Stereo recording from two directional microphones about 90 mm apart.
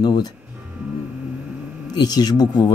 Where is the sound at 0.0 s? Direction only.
50° left (ahead or behind).